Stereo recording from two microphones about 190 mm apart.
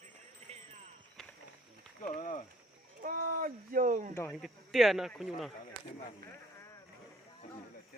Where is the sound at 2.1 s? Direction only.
40° left (ahead or behind).